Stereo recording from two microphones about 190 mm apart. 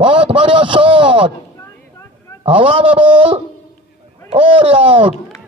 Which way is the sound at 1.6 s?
15° left (ahead or behind).